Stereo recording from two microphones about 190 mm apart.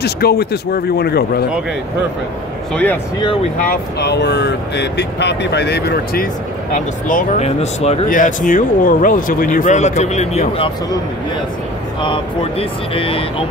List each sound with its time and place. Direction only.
0.0 s speech: 55° left (ahead or behind)
2.7 s speech: 10° left (ahead or behind)
3.5 s speech: 55° left (ahead or behind)
6.7 s speech: 45° left (ahead or behind)
12.0 s speech: 30° left (ahead or behind)